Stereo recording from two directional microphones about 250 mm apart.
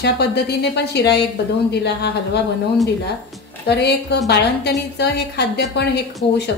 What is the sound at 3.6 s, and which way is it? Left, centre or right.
A woman's voice, left.